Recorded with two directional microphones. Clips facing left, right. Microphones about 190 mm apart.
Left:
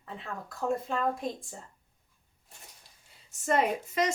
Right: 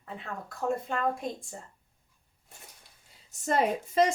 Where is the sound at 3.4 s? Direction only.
30° right (ahead or behind).